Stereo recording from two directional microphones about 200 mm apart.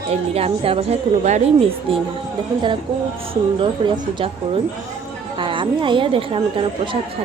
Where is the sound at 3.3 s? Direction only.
25° right (ahead or behind).